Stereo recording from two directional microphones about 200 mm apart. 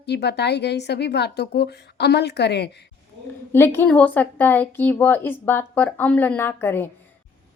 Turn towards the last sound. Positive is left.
turn(degrees=10)  # may be behind; listen again after turning